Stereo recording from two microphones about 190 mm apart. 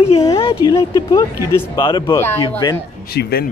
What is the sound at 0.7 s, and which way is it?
Speech, 20° left (ahead or behind).